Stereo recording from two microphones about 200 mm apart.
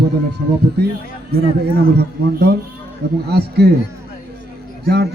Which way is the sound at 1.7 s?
55° right (ahead or behind).